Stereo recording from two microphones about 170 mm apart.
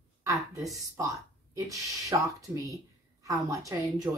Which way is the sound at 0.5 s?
20° right (ahead or behind).